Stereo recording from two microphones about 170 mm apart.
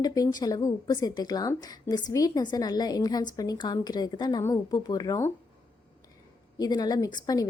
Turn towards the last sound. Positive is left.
turn(degrees=25)  # may be behind; listen again after turning